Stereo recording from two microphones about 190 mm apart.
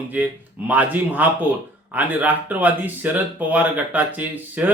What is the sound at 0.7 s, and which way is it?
Speech, 10° right (ahead or behind).